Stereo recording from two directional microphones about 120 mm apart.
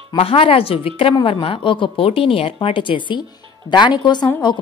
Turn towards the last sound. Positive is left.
turn(degrees=40)  # may be behind; listen again after turning